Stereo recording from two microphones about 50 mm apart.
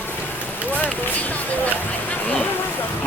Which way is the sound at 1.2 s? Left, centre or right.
Left.